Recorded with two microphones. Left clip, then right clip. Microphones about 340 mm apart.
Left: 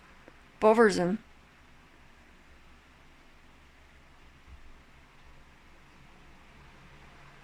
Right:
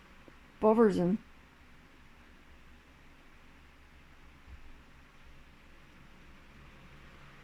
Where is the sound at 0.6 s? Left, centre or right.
Left.